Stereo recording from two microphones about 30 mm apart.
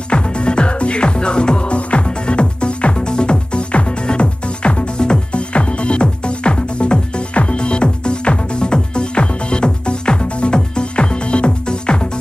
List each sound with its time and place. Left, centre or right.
0.1 s music: left